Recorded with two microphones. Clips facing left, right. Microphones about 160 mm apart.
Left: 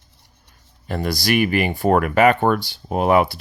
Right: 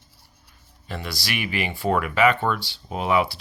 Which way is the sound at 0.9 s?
45° left (ahead or behind).